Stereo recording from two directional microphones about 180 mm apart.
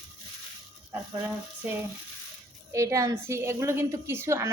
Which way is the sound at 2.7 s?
15° right (ahead or behind).